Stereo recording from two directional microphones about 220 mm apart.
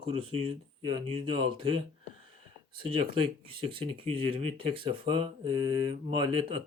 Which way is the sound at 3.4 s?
25° right (ahead or behind).